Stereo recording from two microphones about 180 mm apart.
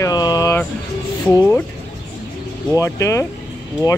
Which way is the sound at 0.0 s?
20° left (ahead or behind).